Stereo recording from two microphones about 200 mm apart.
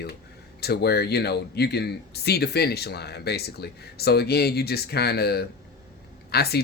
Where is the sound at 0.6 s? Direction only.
55° left (ahead or behind).